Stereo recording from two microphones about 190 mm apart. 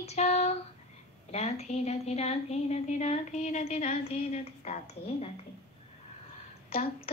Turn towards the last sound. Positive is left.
turn(degrees=30)  # may be behind; listen again after turning